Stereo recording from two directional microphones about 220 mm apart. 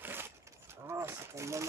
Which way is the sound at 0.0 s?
10° right (ahead or behind).